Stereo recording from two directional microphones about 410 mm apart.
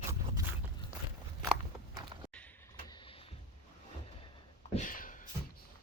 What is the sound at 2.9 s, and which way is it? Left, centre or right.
Vehicle, centre.